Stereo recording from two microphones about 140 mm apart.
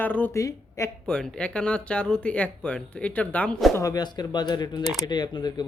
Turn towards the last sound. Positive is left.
turn(degrees=30)  # may be behind; listen again after turning